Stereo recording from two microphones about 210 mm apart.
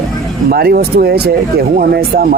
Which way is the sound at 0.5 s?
50° right (ahead or behind).